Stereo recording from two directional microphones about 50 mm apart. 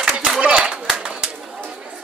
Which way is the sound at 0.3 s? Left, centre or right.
Centre.